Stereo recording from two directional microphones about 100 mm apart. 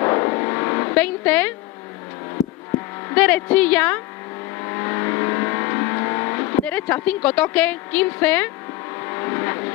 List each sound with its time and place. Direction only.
0.0 s vehicle: 25° left (ahead or behind)
0.9 s a woman's voice: 15° left (ahead or behind)
3.1 s a woman's voice: 15° left (ahead or behind)
4.6 s vehicle: 25° left (ahead or behind)
6.6 s a woman's voice: 15° left (ahead or behind)
9.0 s vehicle: 25° left (ahead or behind)